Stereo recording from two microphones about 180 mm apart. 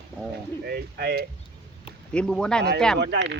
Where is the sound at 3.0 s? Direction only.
75° right (ahead or behind).